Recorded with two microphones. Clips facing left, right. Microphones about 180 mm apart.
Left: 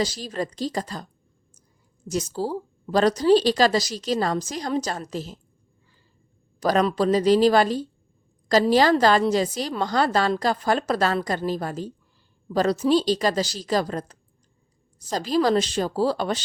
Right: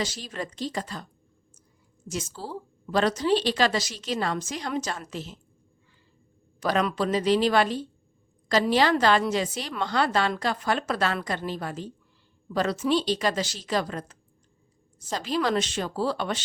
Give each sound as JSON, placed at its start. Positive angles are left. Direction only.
{"t": 0.0, "sound": "a woman's voice", "side_deg": 35}
{"t": 2.0, "sound": "a woman's voice", "side_deg": 40}
{"t": 6.6, "sound": "a woman's voice", "side_deg": 40}